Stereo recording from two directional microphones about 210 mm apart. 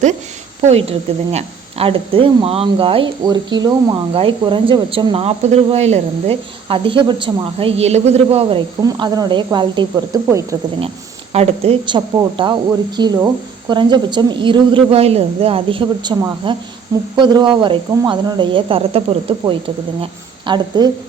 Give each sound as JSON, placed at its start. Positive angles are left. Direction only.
{"t": 0.6, "sound": "a woman's voice", "side_deg": -30}
{"t": 10.8, "sound": "a woman's voice", "side_deg": -30}